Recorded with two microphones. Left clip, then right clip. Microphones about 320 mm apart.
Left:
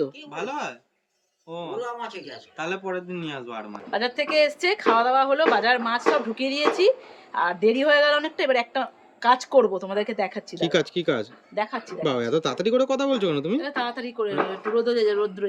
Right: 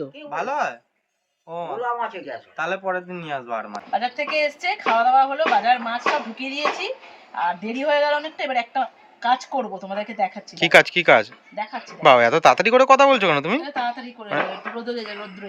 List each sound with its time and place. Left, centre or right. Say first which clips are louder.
0.0 s speech: right 2 dB; centre
2.6 s speech: right 4 dB; centre
3.9 s a woman's voice: left 1 dB; centre
10.5 s speech: right 11 dB; centre
11.5 s speech: left 2 dB; centre
12.0 s speech: right 12 dB; centre
13.6 s a woman's voice: right 2 dB; centre